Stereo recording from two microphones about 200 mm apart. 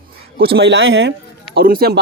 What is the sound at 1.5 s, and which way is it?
Speech, 50° right (ahead or behind).